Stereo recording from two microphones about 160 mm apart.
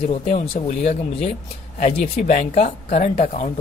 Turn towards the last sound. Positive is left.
turn(degrees=40)  # may be behind; listen again after turning